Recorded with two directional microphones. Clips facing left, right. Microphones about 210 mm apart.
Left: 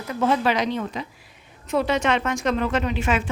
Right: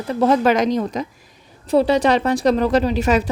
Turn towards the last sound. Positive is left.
turn(degrees=-40)  # may be behind; listen again after turning